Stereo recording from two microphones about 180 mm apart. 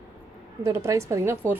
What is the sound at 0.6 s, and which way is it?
Speech, 15° right (ahead or behind).